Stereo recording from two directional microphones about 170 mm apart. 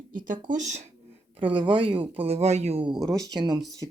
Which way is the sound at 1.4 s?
30° right (ahead or behind).